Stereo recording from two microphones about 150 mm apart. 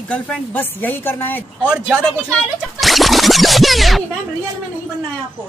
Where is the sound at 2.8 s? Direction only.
Centre (ahead or behind).